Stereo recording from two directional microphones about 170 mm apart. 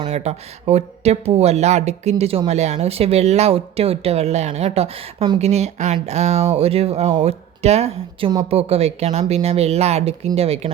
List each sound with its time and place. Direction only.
0.1 s speech: 40° right (ahead or behind)